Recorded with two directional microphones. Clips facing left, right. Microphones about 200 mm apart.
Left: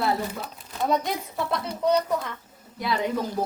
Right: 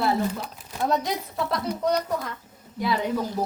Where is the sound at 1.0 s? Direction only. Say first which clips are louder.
Right 1 dB; centre (ahead or behind).